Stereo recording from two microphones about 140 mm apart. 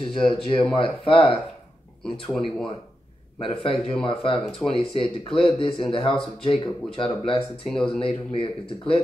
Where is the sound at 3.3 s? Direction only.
40° left (ahead or behind).